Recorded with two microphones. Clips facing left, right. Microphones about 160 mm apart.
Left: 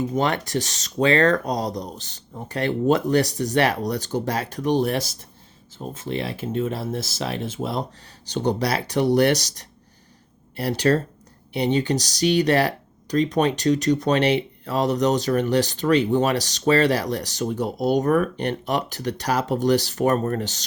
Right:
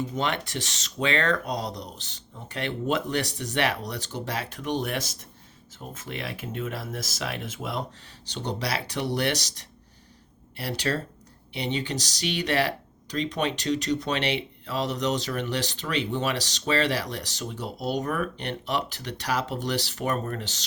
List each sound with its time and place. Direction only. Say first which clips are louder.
0.2 s speech: left 6 dB; 40° left (ahead or behind)
8.3 s speech: left 8 dB; 45° left (ahead or behind)